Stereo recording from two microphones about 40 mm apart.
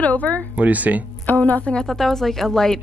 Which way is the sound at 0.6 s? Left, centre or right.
Right.